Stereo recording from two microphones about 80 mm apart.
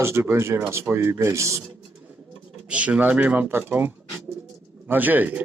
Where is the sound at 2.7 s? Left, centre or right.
Centre.